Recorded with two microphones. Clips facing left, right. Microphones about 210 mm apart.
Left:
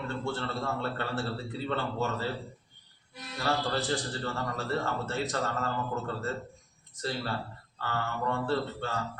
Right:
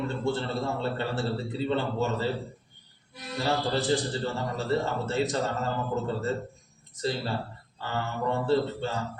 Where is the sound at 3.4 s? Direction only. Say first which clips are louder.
Right 3 dB; 20° right (ahead or behind).